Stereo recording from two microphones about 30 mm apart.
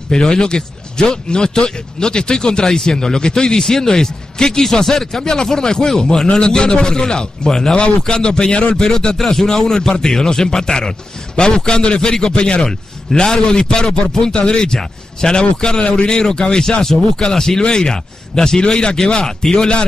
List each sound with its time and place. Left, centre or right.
0.1 s speech: left
8.8 s speech: left